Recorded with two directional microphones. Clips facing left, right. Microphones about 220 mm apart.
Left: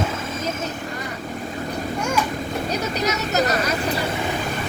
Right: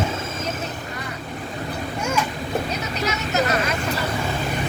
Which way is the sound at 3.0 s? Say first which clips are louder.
Even; 40° left (ahead or behind).